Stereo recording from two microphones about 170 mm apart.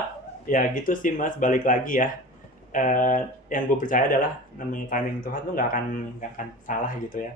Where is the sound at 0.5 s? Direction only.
50° left (ahead or behind).